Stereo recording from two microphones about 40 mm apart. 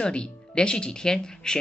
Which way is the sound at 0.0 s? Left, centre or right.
Left.